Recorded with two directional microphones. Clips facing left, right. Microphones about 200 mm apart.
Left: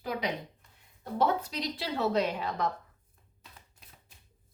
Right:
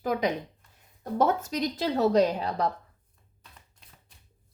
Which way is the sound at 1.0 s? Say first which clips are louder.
Right 3 dB; 45° right (ahead or behind).